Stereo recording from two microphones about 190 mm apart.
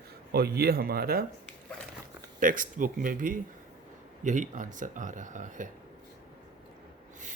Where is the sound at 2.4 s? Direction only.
45° right (ahead or behind).